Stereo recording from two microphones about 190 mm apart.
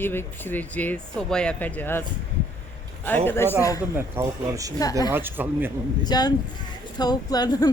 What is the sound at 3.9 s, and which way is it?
Speech, 15° right (ahead or behind).